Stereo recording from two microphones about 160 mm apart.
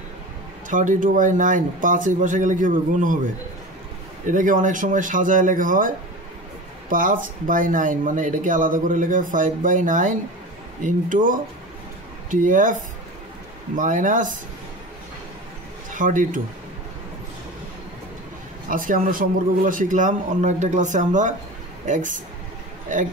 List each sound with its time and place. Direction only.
0.7 s a man's voice: 55° right (ahead or behind)
4.3 s speech: 55° right (ahead or behind)
13.7 s speech: 55° right (ahead or behind)
15.9 s speech: 55° right (ahead or behind)
18.7 s a man's voice: 60° right (ahead or behind)